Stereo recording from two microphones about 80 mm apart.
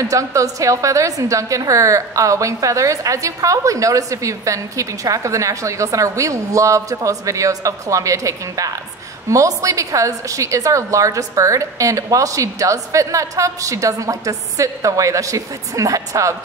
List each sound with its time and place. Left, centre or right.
0.0 s a woman's voice: right